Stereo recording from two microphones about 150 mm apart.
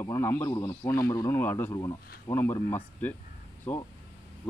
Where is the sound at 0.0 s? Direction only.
20° left (ahead or behind).